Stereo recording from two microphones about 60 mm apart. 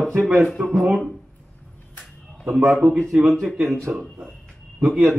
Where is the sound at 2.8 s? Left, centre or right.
Right.